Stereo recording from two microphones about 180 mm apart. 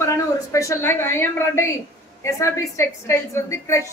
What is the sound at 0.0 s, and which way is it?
A woman's voice, 15° left (ahead or behind).